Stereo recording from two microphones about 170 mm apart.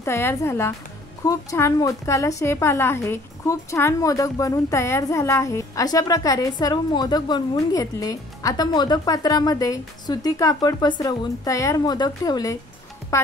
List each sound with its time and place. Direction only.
0.0 s a woman's voice: 15° left (ahead or behind)